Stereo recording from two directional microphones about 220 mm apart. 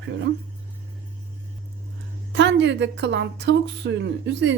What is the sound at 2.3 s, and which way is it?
Speech, 55° right (ahead or behind).